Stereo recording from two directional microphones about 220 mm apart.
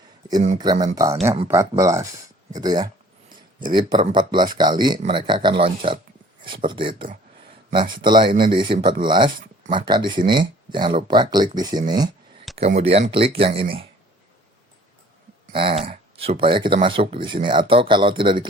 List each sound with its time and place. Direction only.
0.6 s speech: 15° right (ahead or behind)
12.5 s speech: 30° right (ahead or behind)
15.5 s speech: 25° right (ahead or behind)